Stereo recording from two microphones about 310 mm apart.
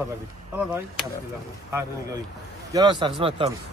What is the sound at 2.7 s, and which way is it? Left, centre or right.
Speech, centre.